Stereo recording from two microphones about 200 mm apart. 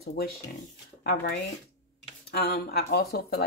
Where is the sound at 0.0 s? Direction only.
50° left (ahead or behind).